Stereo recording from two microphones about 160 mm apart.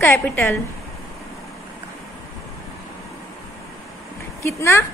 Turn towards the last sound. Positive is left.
turn(degrees=15)  # may be behind; listen again after turning